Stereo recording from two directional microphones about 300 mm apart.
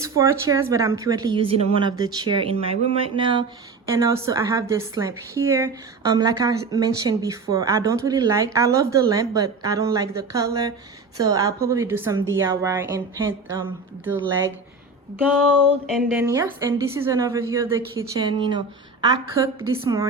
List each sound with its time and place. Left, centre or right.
0.0 s a woman's voice: centre
15.9 s a woman's voice: centre
19.8 s a woman's voice: centre